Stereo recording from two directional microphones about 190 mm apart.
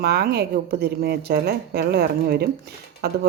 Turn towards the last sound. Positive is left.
turn(degrees=-60)  # may be behind; listen again after turning